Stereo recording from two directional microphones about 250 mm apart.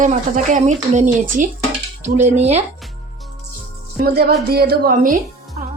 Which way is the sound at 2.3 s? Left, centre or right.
Right.